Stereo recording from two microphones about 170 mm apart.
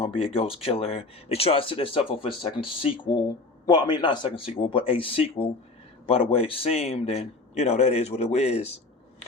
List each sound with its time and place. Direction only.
0.0 s a man's voice: 30° left (ahead or behind)